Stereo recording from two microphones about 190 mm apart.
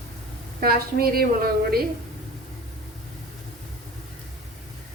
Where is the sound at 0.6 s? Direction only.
50° right (ahead or behind).